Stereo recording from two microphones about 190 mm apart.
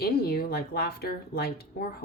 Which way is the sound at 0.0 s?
55° left (ahead or behind).